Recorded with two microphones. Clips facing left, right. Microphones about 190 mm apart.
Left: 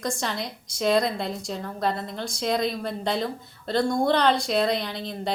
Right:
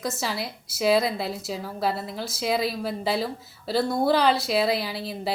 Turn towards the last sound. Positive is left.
turn(degrees=-5)  # may be behind; listen again after turning